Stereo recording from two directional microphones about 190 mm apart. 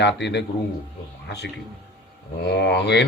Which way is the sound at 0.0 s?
65° left (ahead or behind).